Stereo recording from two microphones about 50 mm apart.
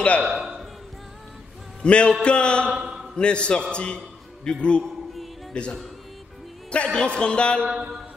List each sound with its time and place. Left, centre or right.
0.2 s a man's voice: centre
1.8 s speech: left
2.7 s mantra: centre
3.2 s speech: left
7.7 s mantra: centre